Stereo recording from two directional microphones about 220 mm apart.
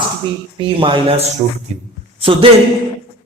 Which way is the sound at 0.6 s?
25° right (ahead or behind).